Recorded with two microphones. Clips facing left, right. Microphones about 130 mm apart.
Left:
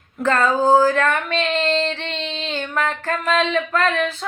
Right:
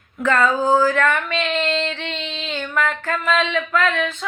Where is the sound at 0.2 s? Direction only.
30° left (ahead or behind).